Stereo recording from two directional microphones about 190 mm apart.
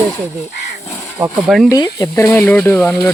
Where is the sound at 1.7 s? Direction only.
20° left (ahead or behind).